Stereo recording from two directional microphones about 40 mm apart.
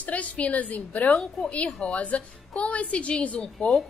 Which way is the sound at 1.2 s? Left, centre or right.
Left.